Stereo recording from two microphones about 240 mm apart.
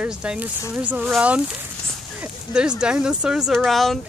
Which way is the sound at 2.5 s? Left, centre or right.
Centre.